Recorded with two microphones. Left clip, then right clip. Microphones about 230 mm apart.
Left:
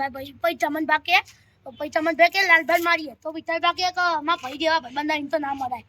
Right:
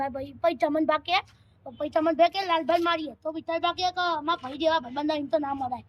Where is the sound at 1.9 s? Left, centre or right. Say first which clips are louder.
Left 3 dB; left.